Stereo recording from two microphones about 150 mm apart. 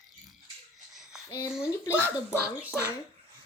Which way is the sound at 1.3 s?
25° left (ahead or behind).